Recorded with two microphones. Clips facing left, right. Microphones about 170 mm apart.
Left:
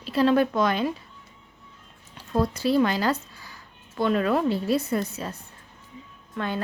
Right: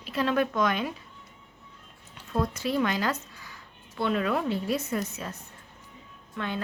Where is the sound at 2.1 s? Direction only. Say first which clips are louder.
Left 4 dB; 35° left (ahead or behind).